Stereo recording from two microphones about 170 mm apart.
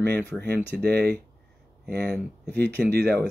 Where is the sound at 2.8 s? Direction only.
75° right (ahead or behind).